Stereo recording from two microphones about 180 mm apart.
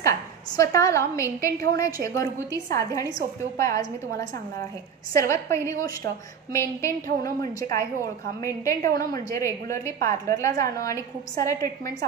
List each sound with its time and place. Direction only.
0.6 s a woman's voice: 15° left (ahead or behind)